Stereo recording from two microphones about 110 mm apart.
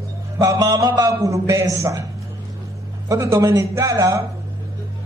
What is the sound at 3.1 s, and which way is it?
Speech, 30° right (ahead or behind).